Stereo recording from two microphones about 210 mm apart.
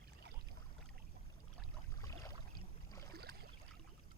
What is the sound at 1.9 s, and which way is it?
Boat, 15° left (ahead or behind).